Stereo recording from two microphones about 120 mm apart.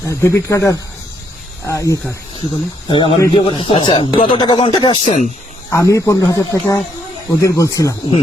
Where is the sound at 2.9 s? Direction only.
45° left (ahead or behind).